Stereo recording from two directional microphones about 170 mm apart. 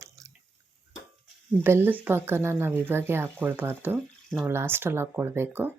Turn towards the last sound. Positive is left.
turn(degrees=-10)  # may be behind; listen again after turning